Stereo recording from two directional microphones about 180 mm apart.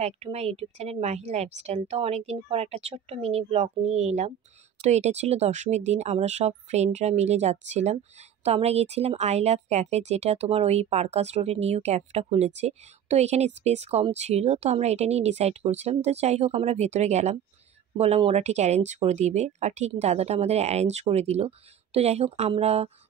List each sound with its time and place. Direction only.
0.0 s speech: 35° right (ahead or behind)